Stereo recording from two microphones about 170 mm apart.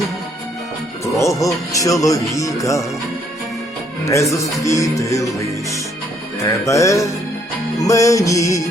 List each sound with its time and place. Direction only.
1.0 s speech: 20° left (ahead or behind)
4.0 s speech: 15° left (ahead or behind)
6.7 s music: 20° left (ahead or behind)
7.8 s speech: 20° left (ahead or behind)